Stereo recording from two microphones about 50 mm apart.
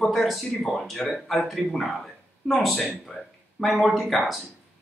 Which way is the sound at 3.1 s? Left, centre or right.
Centre.